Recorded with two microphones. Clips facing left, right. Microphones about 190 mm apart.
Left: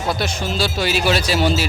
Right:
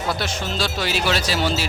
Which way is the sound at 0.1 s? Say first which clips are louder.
Left 4 dB; 10° left (ahead or behind).